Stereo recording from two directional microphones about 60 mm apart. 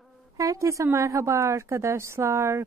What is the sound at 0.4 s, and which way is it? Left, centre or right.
A woman's voice, right.